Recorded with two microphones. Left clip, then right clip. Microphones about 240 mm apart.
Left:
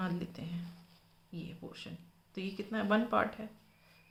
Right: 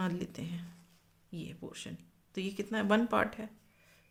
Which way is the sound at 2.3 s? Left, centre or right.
Right.